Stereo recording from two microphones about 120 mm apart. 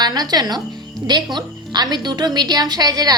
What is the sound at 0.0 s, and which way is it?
A woman's voice, 35° right (ahead or behind).